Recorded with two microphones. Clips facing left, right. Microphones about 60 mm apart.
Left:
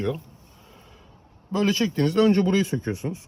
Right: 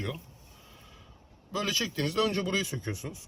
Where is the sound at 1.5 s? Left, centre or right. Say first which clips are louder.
Left 9 dB; left.